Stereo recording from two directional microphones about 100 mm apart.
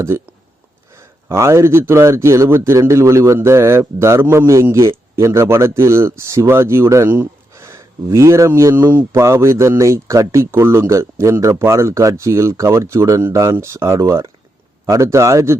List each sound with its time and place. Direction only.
0.9 s a man's voice: 30° right (ahead or behind)